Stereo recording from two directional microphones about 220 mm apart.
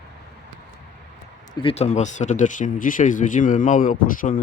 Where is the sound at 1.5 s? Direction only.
25° left (ahead or behind).